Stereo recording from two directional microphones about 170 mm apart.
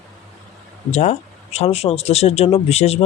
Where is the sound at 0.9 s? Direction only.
40° left (ahead or behind).